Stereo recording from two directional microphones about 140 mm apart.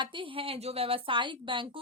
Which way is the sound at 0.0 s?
35° right (ahead or behind).